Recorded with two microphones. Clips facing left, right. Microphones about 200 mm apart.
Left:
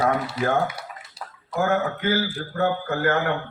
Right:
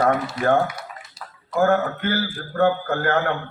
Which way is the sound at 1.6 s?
55° right (ahead or behind).